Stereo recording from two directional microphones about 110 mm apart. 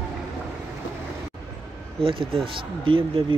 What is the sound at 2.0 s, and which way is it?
Speech, 55° right (ahead or behind).